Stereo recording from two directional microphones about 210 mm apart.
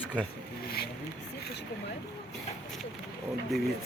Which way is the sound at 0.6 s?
45° left (ahead or behind).